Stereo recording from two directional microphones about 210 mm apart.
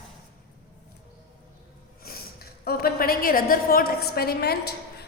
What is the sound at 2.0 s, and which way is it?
A woman's voice, 45° left (ahead or behind).